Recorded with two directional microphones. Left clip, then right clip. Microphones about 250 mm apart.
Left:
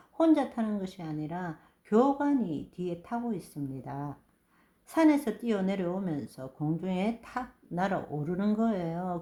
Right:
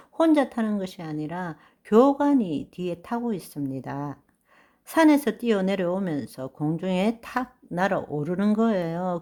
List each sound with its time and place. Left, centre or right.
0.2 s speech: right